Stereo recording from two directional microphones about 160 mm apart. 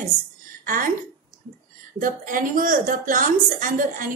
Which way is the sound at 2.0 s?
55° right (ahead or behind).